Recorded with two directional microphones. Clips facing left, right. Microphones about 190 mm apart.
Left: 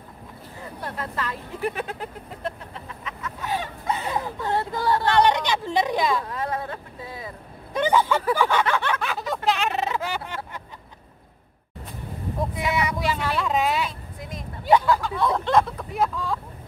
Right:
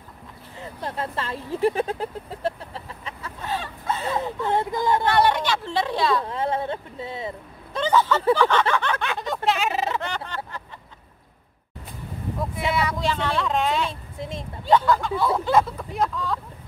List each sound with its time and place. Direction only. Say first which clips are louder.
0.6 s speech: right 3 dB; 25° right (ahead or behind)
3.4 s a sound: left 1 dB; 15° left (ahead or behind)
4.2 s speech: right 2 dB; 15° right (ahead or behind)
5.2 s speech: even; 20° left (ahead or behind)
6.2 s speech: right 3 dB; 25° right (ahead or behind)
7.7 s speech: even; 15° left (ahead or behind)
9.0 s a sound: even; centre (ahead or behind)
12.8 s speech: right 1 dB; 10° left (ahead or behind)
14.1 s speech: right 4 dB; 25° right (ahead or behind)
14.7 s speech: even; centre (ahead or behind)